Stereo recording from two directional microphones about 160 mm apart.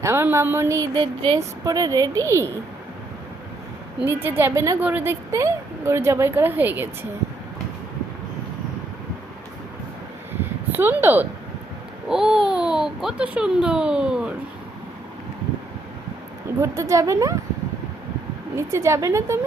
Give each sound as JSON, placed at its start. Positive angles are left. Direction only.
{"t": 0.0, "sound": "a woman's voice", "side_deg": -15}
{"t": 4.0, "sound": "a woman's voice", "side_deg": -15}
{"t": 10.7, "sound": "a child's voice", "side_deg": -15}
{"t": 16.6, "sound": "a woman's voice", "side_deg": -20}
{"t": 18.5, "sound": "a woman's voice", "side_deg": -15}